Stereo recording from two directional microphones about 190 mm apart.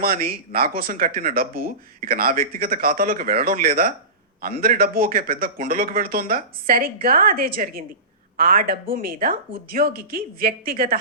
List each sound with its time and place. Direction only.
0.0 s speech: 50° right (ahead or behind)